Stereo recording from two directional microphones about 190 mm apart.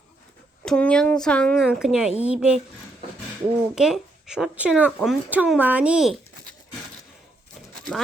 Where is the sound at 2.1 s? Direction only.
35° left (ahead or behind).